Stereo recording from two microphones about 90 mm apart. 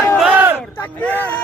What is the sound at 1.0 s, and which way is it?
Speech, 20° left (ahead or behind).